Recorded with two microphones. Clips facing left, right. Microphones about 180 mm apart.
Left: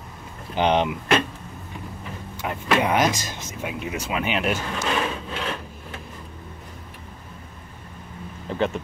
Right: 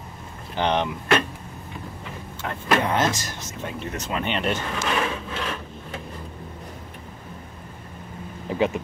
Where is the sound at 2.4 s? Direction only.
15° left (ahead or behind).